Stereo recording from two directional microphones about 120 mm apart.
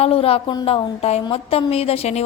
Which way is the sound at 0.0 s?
55° left (ahead or behind).